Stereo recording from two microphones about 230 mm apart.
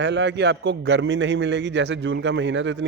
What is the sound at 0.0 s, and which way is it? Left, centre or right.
A man's voice, right.